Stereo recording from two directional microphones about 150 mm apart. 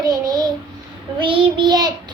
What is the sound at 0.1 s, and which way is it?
Child singing, 25° right (ahead or behind).